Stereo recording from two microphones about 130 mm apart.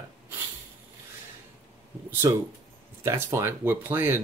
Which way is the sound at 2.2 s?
25° right (ahead or behind).